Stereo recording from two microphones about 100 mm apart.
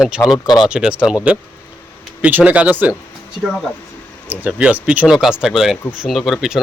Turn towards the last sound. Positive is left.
turn(degrees=-5)  # may be behind; listen again after turning